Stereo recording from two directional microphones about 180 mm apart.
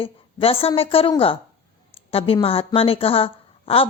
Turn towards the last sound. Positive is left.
turn(degrees=30)  # may be behind; listen again after turning